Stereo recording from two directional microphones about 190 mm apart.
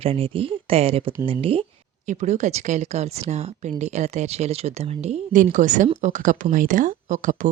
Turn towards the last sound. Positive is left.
turn(degrees=-45)  # may be behind; listen again after turning